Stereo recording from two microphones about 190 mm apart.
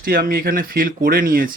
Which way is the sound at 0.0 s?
50° right (ahead or behind).